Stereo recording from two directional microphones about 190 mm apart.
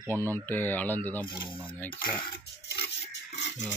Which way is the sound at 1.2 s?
25° left (ahead or behind).